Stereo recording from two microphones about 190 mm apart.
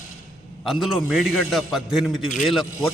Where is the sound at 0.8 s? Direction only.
Centre (ahead or behind).